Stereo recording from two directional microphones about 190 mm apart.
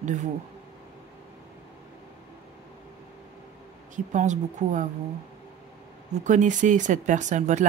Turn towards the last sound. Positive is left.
turn(degrees=-40)  # may be behind; listen again after turning